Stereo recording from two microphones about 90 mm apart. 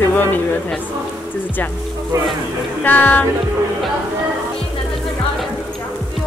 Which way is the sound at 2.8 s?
20° left (ahead or behind).